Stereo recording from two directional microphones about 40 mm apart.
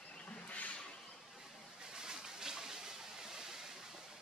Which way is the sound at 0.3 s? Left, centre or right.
Left.